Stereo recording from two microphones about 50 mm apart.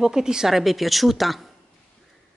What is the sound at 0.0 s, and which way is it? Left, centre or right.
Speech, centre.